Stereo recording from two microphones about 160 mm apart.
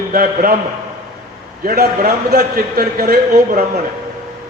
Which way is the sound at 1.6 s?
75° right (ahead or behind).